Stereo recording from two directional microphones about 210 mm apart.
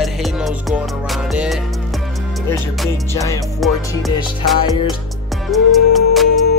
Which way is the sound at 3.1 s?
15° left (ahead or behind).